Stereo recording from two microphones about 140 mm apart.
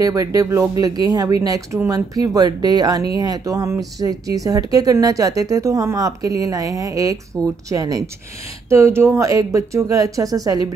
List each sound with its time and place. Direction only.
0.0 s speech: 25° right (ahead or behind)